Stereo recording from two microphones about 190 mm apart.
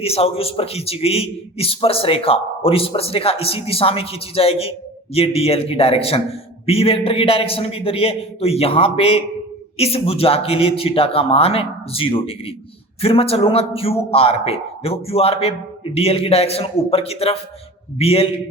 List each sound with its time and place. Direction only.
0.0 s a man's voice: 30° left (ahead or behind)